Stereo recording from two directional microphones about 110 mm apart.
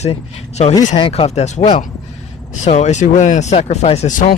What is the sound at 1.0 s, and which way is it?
Speech, 60° left (ahead or behind).